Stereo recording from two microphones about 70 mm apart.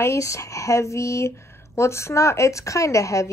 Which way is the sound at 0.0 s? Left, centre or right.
Left.